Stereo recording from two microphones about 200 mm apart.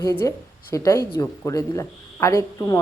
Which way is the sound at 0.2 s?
15° left (ahead or behind).